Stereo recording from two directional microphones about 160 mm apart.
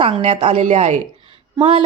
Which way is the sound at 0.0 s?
35° right (ahead or behind).